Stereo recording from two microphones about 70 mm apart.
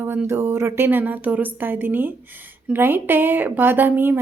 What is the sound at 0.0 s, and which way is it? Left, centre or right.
A woman's voice, right.